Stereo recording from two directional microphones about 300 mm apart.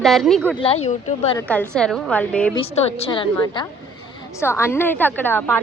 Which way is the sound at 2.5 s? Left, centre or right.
Centre.